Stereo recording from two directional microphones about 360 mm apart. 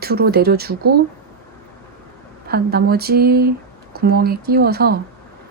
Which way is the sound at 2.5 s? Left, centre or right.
Right.